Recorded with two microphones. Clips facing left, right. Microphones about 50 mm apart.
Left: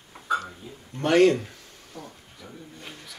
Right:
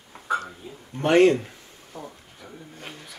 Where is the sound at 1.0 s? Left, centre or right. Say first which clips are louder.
Right 1 dB; right.